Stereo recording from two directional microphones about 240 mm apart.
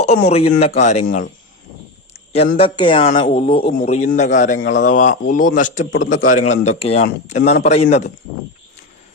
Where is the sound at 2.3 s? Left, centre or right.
Left.